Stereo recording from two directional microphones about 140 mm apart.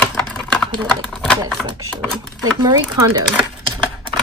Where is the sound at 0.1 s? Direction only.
5° left (ahead or behind).